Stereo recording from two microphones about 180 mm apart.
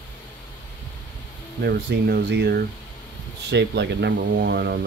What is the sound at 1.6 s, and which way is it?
Speech, 60° right (ahead or behind).